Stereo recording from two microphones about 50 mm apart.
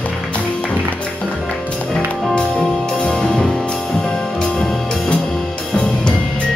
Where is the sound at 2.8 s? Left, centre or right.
Centre.